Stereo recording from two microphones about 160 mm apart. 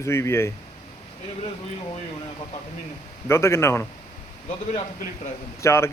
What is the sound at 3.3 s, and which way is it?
Speech, 15° left (ahead or behind).